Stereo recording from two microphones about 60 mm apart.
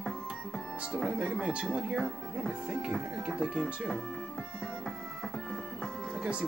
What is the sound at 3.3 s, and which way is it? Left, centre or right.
Speech, centre.